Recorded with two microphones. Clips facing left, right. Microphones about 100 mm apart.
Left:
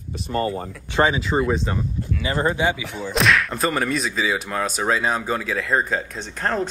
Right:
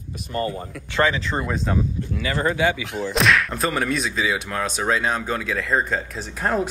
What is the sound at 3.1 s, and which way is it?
Speech, centre (ahead or behind).